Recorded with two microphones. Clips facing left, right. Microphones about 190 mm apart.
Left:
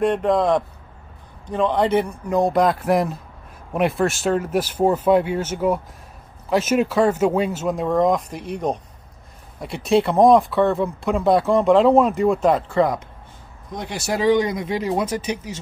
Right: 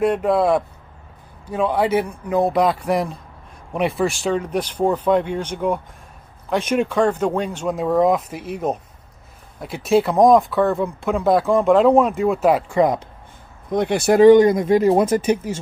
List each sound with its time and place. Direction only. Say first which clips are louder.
0.0 s a man's voice: right 1 dB; 5° right (ahead or behind)
13.7 s speech: right 9 dB; 55° right (ahead or behind)